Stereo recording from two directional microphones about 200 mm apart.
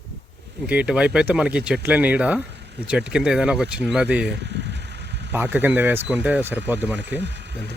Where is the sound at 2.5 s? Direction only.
60° right (ahead or behind).